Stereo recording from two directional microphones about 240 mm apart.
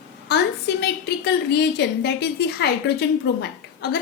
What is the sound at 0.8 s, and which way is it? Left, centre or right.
A woman's voice, left.